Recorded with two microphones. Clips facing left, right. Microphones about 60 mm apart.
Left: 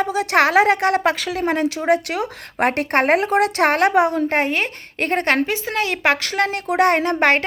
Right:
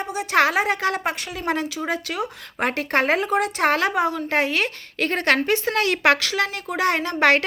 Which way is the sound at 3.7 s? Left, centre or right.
Left.